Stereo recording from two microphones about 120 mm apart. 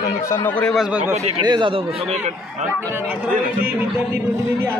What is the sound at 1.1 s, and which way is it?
Speech, 65° right (ahead or behind).